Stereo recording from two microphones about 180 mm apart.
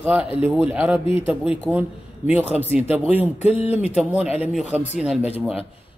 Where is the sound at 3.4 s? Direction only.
35° left (ahead or behind).